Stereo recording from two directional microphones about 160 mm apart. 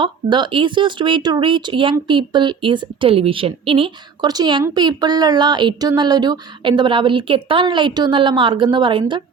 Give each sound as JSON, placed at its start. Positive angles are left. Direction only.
{"t": 0.0, "sound": "speech", "side_deg": -30}